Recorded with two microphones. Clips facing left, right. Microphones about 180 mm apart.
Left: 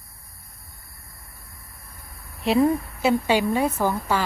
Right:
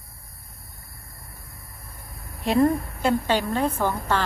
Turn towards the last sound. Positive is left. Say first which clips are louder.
# left 1 dB
turn(degrees=10)  # may be behind; listen again after turning